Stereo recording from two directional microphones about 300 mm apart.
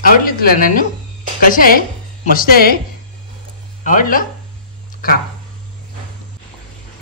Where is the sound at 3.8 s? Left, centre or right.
Left.